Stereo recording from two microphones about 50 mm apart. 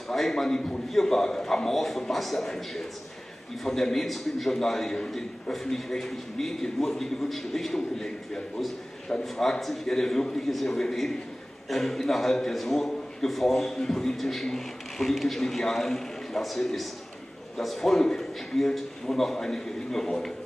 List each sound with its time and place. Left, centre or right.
0.1 s a man's voice: centre
9.2 s a man's voice: centre